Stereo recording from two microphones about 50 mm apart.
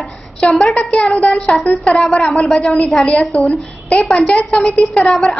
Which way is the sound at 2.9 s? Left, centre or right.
Centre.